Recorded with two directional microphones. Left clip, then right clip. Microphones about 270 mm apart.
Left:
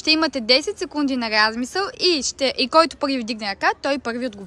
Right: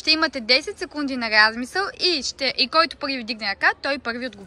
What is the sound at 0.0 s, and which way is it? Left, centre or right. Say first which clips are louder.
Speech: left 1 dB; centre.